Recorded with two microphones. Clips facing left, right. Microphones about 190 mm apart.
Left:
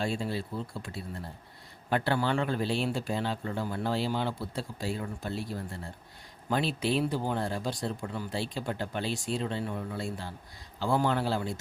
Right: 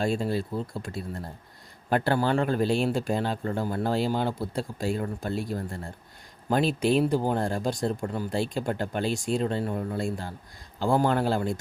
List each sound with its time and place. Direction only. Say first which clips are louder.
0.0 s speech: right 5 dB; 45° right (ahead or behind)